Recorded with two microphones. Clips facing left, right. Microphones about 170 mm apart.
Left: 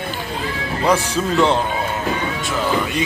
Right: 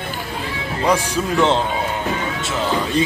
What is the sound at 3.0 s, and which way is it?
Speech, 35° right (ahead or behind).